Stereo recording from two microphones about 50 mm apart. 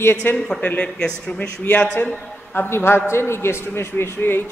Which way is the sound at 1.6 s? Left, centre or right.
Left.